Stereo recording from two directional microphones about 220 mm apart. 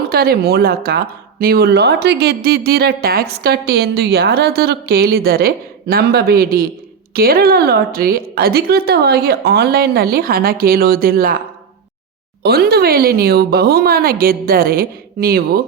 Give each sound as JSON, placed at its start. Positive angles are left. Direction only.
{"t": 0.1, "sound": "a woman's voice", "side_deg": -45}
{"t": 12.4, "sound": "a woman's voice", "side_deg": -45}